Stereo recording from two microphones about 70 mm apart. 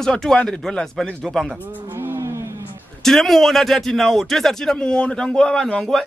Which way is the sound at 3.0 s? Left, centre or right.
Centre.